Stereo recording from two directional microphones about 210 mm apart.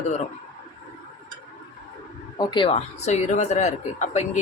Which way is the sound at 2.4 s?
20° left (ahead or behind).